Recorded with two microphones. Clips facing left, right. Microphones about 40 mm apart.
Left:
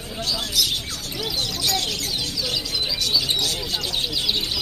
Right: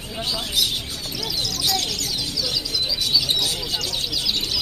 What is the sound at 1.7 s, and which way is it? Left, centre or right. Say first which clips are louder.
Speech: even; left.